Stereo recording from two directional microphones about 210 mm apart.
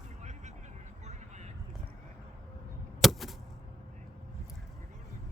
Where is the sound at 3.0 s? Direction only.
Centre (ahead or behind).